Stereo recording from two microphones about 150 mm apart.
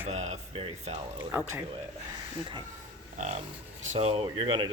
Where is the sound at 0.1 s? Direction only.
50° right (ahead or behind).